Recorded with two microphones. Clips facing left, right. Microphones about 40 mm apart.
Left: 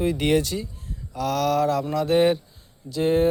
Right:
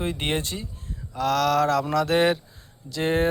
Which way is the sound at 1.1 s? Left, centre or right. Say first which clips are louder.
Right 1 dB; right.